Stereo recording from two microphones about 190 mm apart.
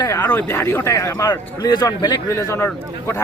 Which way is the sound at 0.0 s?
15° left (ahead or behind).